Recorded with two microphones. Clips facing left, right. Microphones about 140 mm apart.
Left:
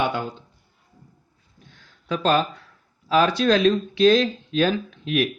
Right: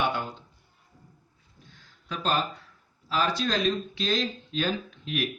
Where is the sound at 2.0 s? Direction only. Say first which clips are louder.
Left 7 dB; 75° left (ahead or behind).